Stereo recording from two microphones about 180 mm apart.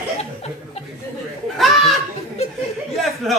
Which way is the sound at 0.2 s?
35° left (ahead or behind).